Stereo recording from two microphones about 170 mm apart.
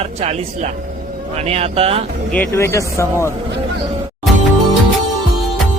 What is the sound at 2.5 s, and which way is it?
Speech, 15° left (ahead or behind).